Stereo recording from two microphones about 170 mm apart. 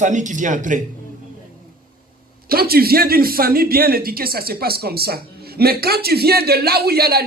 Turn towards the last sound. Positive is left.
turn(degrees=-65)  # may be behind; listen again after turning